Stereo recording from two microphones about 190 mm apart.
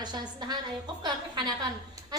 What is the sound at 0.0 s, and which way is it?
Speech, 20° right (ahead or behind).